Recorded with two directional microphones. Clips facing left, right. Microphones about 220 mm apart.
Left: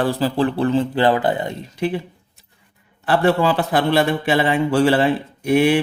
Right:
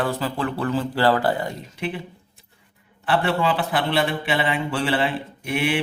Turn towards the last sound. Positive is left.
turn(degrees=40)  # may be behind; listen again after turning